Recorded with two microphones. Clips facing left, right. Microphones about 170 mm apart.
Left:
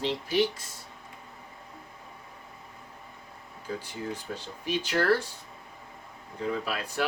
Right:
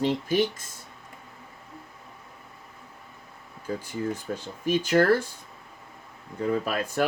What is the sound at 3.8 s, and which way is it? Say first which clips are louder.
Speech: right 5 dB; 45° right (ahead or behind).